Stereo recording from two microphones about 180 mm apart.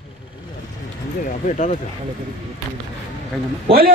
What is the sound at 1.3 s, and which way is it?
Speech, 45° left (ahead or behind).